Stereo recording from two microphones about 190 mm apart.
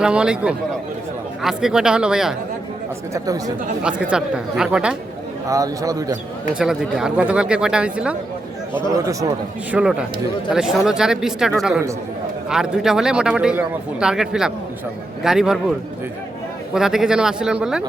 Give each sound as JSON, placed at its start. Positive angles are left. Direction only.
{"t": 0.0, "sound": "a man's voice", "side_deg": -5}
{"t": 3.1, "sound": "a man's voice", "side_deg": -20}
{"t": 3.8, "sound": "a man's voice", "side_deg": -5}
{"t": 5.5, "sound": "a man's voice", "side_deg": -20}
{"t": 6.5, "sound": "a man's voice", "side_deg": -5}
{"t": 8.9, "sound": "a man's voice", "side_deg": -15}
{"t": 9.7, "sound": "a man's voice", "side_deg": -5}
{"t": 16.7, "sound": "a man's voice", "side_deg": 0}